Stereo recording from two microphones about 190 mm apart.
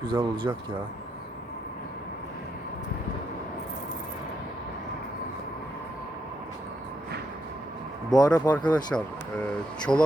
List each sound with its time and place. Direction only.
0.0 s speech: 25° right (ahead or behind)
8.1 s speech: 20° left (ahead or behind)
8.9 s speech: 5° left (ahead or behind)